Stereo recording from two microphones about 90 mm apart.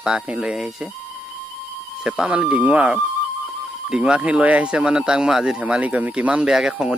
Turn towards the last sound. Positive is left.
turn(degrees=-10)  # may be behind; listen again after turning